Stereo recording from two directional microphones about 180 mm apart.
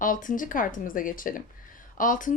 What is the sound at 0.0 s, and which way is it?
A woman's voice, 45° left (ahead or behind).